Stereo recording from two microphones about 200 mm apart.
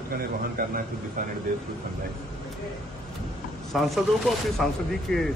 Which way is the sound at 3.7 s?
Centre (ahead or behind).